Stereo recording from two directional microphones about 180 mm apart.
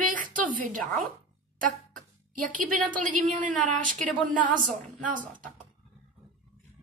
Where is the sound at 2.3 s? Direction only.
50° right (ahead or behind).